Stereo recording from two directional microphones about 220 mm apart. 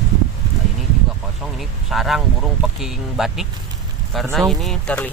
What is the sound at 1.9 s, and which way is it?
Speech, centre (ahead or behind).